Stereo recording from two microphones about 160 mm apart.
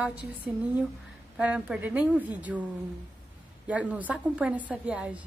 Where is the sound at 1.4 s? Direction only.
10° right (ahead or behind).